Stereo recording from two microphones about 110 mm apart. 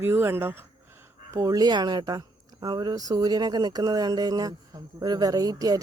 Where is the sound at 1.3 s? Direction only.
35° right (ahead or behind).